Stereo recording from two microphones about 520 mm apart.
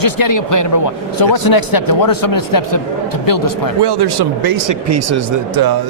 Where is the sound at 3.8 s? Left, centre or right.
Right.